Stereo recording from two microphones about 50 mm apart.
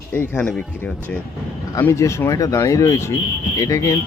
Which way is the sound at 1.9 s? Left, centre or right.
Left.